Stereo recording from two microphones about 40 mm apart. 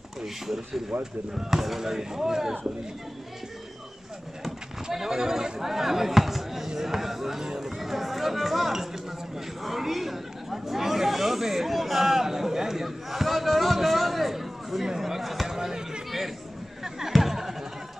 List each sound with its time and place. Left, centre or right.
0.9 s speech: right
1.3 s speech: centre
4.9 s speech: centre
16.8 s chatter: centre